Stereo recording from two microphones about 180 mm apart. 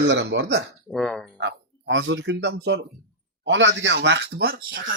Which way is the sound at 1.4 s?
85° right.